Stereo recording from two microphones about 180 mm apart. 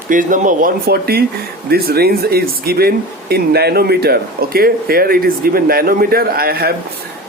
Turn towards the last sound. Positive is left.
turn(degrees=-60)  # may be behind; listen again after turning